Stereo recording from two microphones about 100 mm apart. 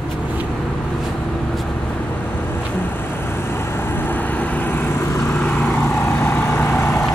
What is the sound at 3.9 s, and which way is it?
Vehicle, 20° left (ahead or behind).